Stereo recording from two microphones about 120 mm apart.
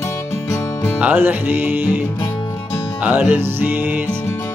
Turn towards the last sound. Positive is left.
turn(degrees=-15)  # may be behind; listen again after turning